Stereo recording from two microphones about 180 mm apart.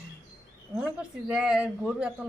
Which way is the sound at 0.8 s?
5° right (ahead or behind).